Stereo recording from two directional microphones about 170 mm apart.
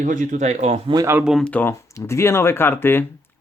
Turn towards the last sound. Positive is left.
turn(degrees=15)  # may be behind; listen again after turning